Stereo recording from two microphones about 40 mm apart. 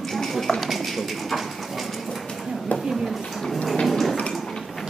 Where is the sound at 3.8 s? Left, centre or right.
Centre.